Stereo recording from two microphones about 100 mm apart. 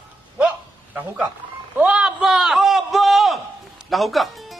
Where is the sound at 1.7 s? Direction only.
10° right (ahead or behind).